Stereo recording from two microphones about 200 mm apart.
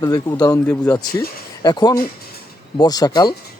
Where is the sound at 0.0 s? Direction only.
15° left (ahead or behind).